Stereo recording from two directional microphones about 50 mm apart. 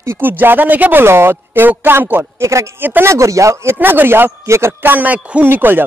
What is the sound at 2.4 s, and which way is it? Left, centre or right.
Speech, right.